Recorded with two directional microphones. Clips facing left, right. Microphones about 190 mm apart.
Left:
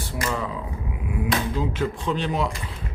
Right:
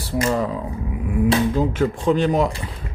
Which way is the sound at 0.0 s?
30° right (ahead or behind).